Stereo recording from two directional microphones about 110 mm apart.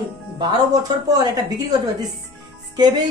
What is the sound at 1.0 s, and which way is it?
A woman's voice, 35° right (ahead or behind).